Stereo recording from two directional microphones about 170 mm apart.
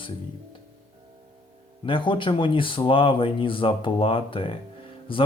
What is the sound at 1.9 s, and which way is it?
Speech, 30° left (ahead or behind).